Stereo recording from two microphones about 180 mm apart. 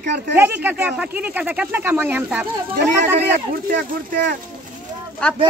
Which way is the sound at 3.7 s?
65° right (ahead or behind).